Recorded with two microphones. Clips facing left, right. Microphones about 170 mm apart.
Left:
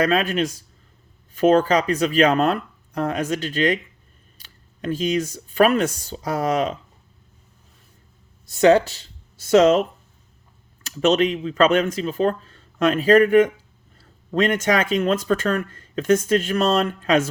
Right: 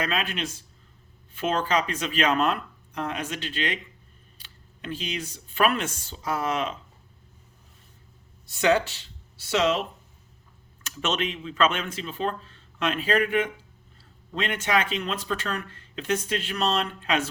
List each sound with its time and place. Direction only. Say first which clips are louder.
0.0 s speech: left 9 dB; 40° left (ahead or behind)
8.4 s speech: left 8 dB; 40° left (ahead or behind)
10.8 s speech: left 10 dB; 35° left (ahead or behind)